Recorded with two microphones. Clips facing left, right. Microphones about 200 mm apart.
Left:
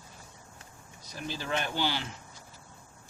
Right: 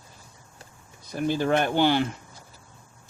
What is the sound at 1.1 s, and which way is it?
Speech, 55° right (ahead or behind).